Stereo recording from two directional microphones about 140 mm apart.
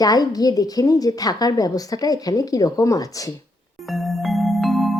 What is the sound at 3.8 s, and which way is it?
Music, centre (ahead or behind).